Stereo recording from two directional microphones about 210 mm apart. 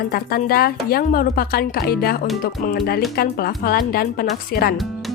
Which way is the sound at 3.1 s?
45° left (ahead or behind).